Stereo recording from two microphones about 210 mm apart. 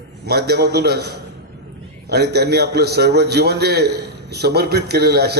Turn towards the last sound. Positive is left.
turn(degrees=-50)  # may be behind; listen again after turning